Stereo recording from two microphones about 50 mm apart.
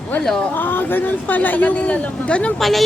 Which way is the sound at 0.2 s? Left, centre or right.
Centre.